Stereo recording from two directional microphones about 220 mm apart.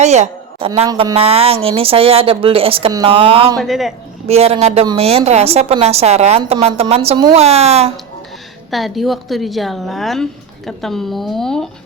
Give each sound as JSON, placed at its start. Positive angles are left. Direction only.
{"t": 0.0, "sound": "a sound", "side_deg": -30}
{"t": 0.7, "sound": "a woman's voice", "side_deg": -20}
{"t": 3.6, "sound": "a woman's voice", "side_deg": 0}
{"t": 4.3, "sound": "a woman's voice", "side_deg": -30}
{"t": 8.7, "sound": "a woman's voice", "side_deg": 0}